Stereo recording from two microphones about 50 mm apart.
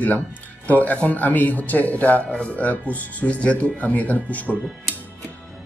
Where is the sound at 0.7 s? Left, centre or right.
Left.